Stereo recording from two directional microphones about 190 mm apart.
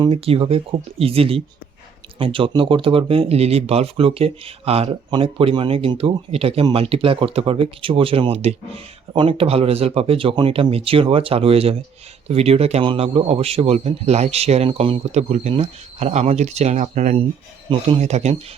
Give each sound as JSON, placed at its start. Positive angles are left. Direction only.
{"t": 0.0, "sound": "a man's voice", "side_deg": -30}